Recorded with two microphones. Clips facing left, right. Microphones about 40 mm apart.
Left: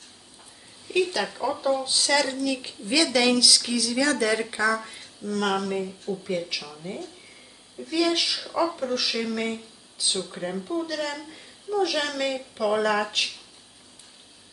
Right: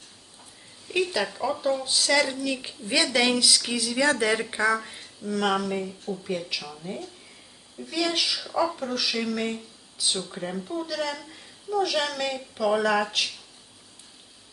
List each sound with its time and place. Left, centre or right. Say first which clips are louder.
0.9 s a woman's voice: left 1 dB; centre; by 4.8 s right
4.8 s a woman's voice: left 1 dB; centre